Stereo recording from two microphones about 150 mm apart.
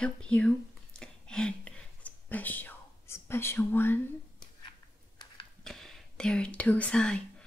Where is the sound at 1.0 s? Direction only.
5° left (ahead or behind).